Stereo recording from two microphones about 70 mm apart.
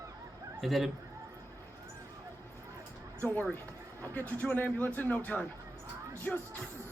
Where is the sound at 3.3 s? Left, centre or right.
Left.